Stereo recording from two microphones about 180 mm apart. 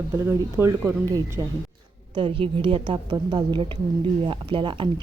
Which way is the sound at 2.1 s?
30° right (ahead or behind).